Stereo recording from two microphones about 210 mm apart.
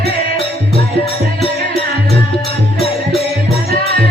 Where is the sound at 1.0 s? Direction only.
25° left (ahead or behind).